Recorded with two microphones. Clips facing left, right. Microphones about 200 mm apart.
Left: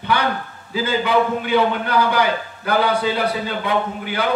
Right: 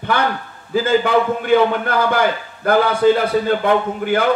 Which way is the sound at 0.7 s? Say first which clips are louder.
Right 4 dB; 50° right (ahead or behind).